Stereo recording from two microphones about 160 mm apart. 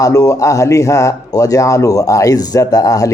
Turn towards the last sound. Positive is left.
turn(degrees=20)  # may be behind; listen again after turning